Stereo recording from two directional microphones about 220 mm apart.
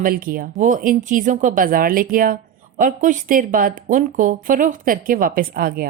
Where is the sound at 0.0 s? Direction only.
40° right (ahead or behind).